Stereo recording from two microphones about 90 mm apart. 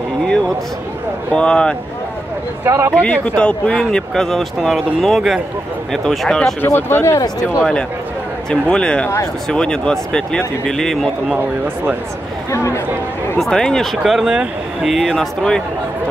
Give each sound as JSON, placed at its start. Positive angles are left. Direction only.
{"t": 1.3, "sound": "speech", "side_deg": 10}
{"t": 2.6, "sound": "speech", "side_deg": -30}
{"t": 2.9, "sound": "speech", "side_deg": 10}
{"t": 6.6, "sound": "speech", "side_deg": 25}
{"t": 7.2, "sound": "speech", "side_deg": 40}
{"t": 8.5, "sound": "speech", "side_deg": 10}
{"t": 12.4, "sound": "speech", "side_deg": 35}
{"t": 13.4, "sound": "speech", "side_deg": 5}